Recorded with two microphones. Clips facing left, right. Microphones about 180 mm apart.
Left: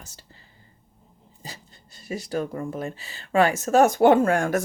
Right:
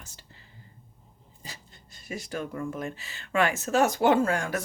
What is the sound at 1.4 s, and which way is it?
Speech, 35° left (ahead or behind).